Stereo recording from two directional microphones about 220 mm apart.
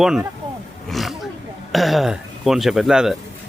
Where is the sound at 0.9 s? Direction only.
Centre (ahead or behind).